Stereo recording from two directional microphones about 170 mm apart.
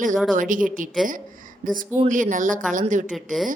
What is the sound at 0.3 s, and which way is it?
A woman's voice, 50° right (ahead or behind).